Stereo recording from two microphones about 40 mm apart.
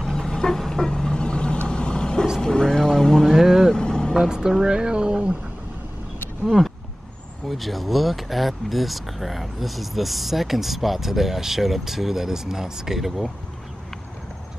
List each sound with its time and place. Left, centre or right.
0.0 s vehicle: centre
3.3 s vehicle: centre
3.7 s vehicle: centre
4.2 s a sound: centre
7.4 s speech: centre